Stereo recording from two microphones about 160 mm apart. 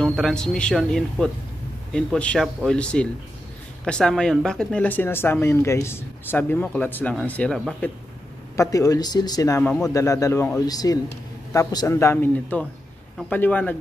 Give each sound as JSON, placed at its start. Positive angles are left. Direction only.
{"t": 0.0, "sound": "speech", "side_deg": 5}
{"t": 8.5, "sound": "speech", "side_deg": 20}
{"t": 9.7, "sound": "speech", "side_deg": 5}
{"t": 9.9, "sound": "speech", "side_deg": 20}